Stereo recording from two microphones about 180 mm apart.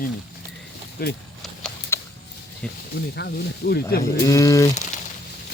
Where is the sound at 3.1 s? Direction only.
65° left (ahead or behind).